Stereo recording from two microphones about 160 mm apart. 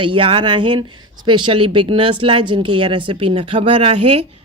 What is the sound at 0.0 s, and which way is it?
Speech, 30° right (ahead or behind).